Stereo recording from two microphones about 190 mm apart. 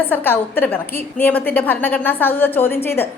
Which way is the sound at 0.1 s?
10° left (ahead or behind).